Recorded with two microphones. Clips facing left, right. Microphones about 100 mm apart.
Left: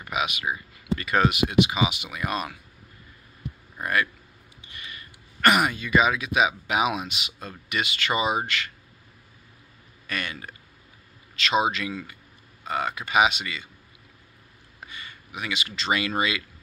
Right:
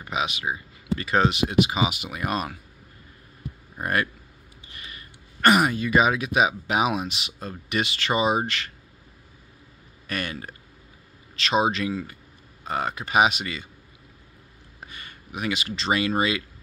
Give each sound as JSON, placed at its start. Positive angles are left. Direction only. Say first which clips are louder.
{"t": 0.0, "sound": "speech", "louder": "even", "side_deg": -30}
{"t": 3.8, "sound": "speech", "louder": "even", "side_deg": -40}
{"t": 10.0, "sound": "speech", "louder": "right 2 dB", "side_deg": -35}
{"t": 14.8, "sound": "a sound", "louder": "left 1 dB", "side_deg": -45}
{"t": 16.2, "sound": "speech", "louder": "right 2 dB", "side_deg": -35}